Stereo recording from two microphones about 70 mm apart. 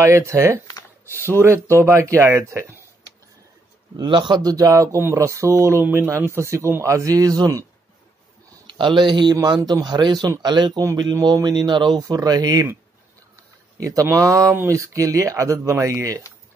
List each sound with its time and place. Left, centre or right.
0.0 s speech: right
3.9 s a man's voice: right
5.8 s a man's voice: right
8.9 s a man's voice: right
11.3 s a man's voice: right
12.0 s a man's voice: right
13.7 s speech: right